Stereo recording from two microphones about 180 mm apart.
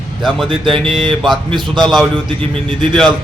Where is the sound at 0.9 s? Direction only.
30° right (ahead or behind).